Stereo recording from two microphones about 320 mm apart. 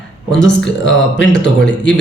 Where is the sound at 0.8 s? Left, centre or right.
Left.